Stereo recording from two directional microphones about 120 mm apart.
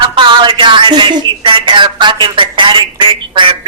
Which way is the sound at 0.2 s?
40° right (ahead or behind).